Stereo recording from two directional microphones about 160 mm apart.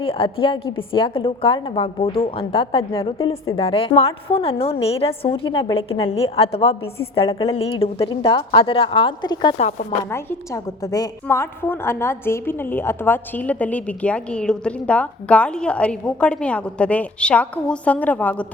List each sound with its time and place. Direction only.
0.0 s a woman's voice: 35° left (ahead or behind)
9.6 s speech: 45° left (ahead or behind)
10.1 s a woman's voice: 20° left (ahead or behind)